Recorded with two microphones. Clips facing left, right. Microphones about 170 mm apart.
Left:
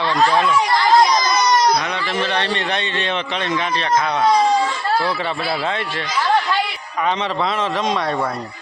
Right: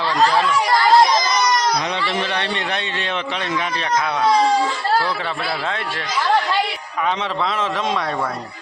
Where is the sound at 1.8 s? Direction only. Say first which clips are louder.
Right 1 dB; 25° right (ahead or behind).